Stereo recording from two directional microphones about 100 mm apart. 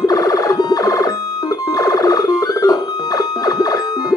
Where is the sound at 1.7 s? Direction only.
35° left (ahead or behind).